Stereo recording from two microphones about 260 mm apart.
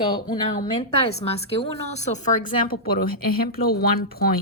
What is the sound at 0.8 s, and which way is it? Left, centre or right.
A woman's voice, left.